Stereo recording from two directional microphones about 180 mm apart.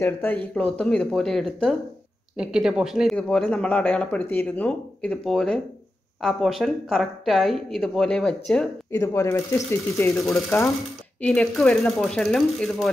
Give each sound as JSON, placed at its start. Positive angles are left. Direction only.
{"t": 0.0, "sound": "speech", "side_deg": 10}
{"t": 8.9, "sound": "speech", "side_deg": 15}
{"t": 11.1, "sound": "speech", "side_deg": 5}